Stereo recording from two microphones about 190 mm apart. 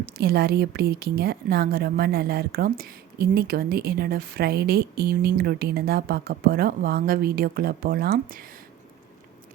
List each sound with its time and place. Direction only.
0.0 s a woman's voice: 55° right (ahead or behind)